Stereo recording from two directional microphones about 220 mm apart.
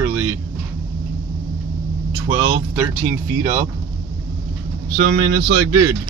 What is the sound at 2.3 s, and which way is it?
Speech, 15° right (ahead or behind).